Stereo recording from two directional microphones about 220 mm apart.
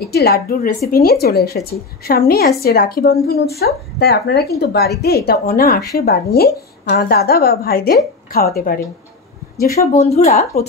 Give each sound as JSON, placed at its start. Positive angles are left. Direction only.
{"t": 0.1, "sound": "speech", "side_deg": 45}
{"t": 9.9, "sound": "speech", "side_deg": 30}